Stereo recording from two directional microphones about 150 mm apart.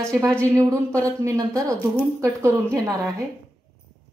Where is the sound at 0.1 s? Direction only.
15° right (ahead or behind).